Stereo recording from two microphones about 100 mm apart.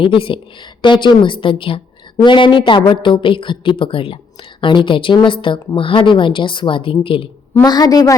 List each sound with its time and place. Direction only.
0.0 s a woman's voice: 60° left (ahead or behind)
7.6 s a woman's voice: 40° left (ahead or behind)